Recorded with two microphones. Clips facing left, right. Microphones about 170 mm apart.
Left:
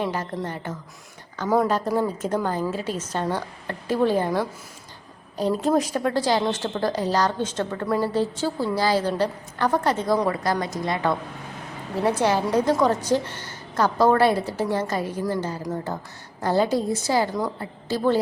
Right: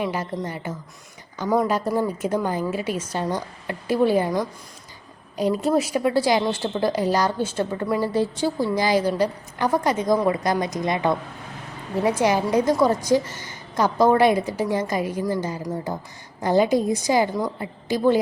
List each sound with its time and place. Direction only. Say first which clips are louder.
0.0 s a woman's voice: right 1 dB; 10° right (ahead or behind)
1.5 s speech: even; centre (ahead or behind)
2.0 s a woman's voice: right 1 dB; 10° right (ahead or behind)
5.4 s a woman's voice: right 1 dB; 5° right (ahead or behind)